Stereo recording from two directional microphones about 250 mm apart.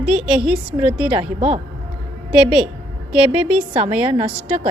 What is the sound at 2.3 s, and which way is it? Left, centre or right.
Speech, centre.